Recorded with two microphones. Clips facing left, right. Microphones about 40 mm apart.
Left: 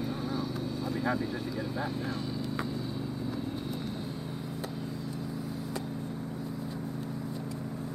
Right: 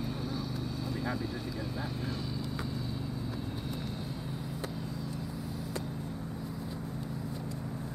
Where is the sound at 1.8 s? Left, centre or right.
Centre.